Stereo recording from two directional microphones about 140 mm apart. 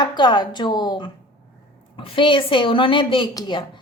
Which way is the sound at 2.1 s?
35° left (ahead or behind).